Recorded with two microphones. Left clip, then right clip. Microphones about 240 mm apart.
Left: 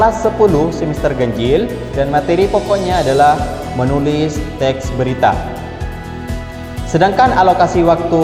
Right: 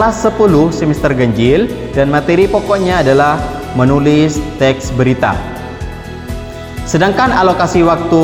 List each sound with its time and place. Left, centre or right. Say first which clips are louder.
0.0 s speech: right 1 dB; right
6.9 s speech: even; right